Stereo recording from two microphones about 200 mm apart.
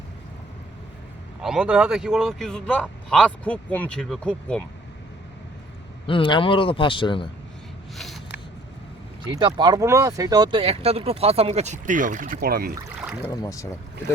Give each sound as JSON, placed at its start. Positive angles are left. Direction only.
{"t": 1.4, "sound": "speech", "side_deg": -5}
{"t": 6.1, "sound": "speech", "side_deg": 25}
{"t": 7.9, "sound": "a sound", "side_deg": 0}
{"t": 9.2, "sound": "speech", "side_deg": -20}
{"t": 13.0, "sound": "boat", "side_deg": -5}
{"t": 13.3, "sound": "speech", "side_deg": 15}